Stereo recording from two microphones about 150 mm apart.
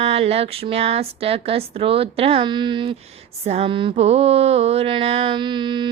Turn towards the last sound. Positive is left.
turn(degrees=-30)  # may be behind; listen again after turning